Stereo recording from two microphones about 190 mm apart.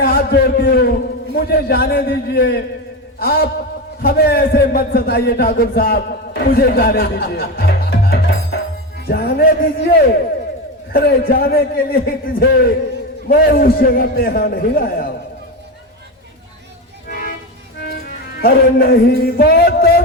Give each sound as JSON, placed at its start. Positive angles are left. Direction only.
{"t": 0.0, "sound": "a man's voice", "side_deg": 50}
{"t": 17.1, "sound": "vehicle", "side_deg": 50}
{"t": 17.7, "sound": "music", "side_deg": 55}